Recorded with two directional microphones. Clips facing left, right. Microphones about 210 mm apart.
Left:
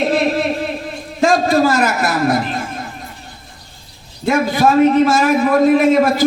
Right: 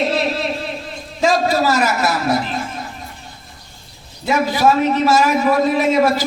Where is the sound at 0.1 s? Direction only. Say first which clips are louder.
Left 4 dB; 50° left (ahead or behind).